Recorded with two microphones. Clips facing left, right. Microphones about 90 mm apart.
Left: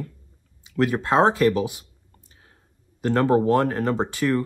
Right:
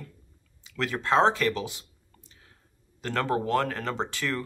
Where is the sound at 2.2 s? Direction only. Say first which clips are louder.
Left 2 dB; 30° left (ahead or behind).